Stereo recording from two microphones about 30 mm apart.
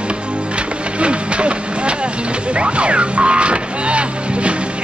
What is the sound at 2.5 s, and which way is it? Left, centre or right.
Music, right.